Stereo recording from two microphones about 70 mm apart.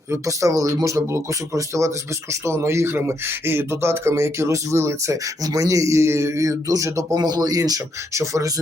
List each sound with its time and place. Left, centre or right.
0.1 s speech: right
8.1 s speech: right